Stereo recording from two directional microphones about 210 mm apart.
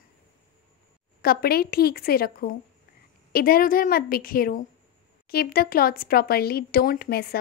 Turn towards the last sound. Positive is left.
turn(degrees=45)  # may be behind; listen again after turning